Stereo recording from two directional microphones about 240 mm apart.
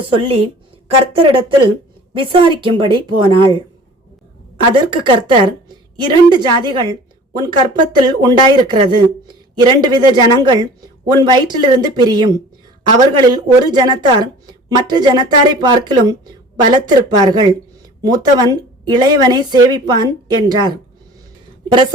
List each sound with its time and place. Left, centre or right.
0.1 s a woman's voice: right
4.7 s a woman's voice: right